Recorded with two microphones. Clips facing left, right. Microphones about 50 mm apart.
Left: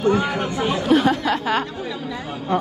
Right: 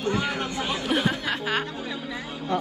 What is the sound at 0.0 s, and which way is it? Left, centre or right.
Speech, left.